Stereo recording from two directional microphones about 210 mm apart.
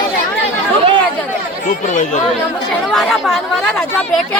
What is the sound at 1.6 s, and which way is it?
Speech, 35° left (ahead or behind).